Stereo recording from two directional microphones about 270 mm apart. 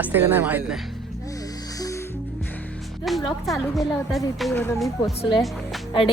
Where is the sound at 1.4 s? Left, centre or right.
Centre.